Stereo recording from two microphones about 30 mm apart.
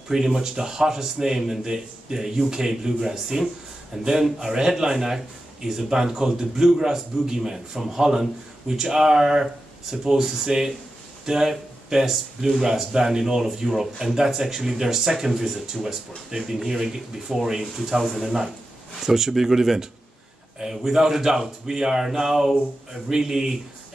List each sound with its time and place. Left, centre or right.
0.1 s speech: centre
18.9 s a man's voice: centre